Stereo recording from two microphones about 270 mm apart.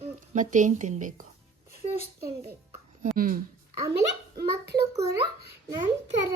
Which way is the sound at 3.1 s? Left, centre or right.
Right.